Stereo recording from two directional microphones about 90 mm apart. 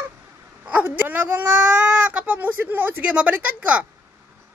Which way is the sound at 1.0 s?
15° right (ahead or behind).